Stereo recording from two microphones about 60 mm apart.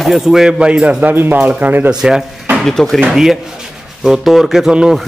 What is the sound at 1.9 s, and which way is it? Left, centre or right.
Speech, centre.